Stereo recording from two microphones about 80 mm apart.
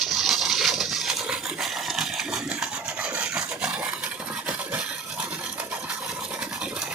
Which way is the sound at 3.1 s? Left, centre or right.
Centre.